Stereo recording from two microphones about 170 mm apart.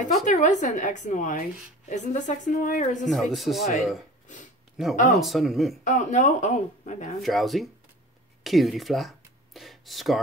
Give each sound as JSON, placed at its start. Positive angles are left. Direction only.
{"t": 0.0, "sound": "speech", "side_deg": 45}
{"t": 3.0, "sound": "speech", "side_deg": 0}
{"t": 5.1, "sound": "speech", "side_deg": 0}
{"t": 5.9, "sound": "speech", "side_deg": 45}
{"t": 7.2, "sound": "speech", "side_deg": 0}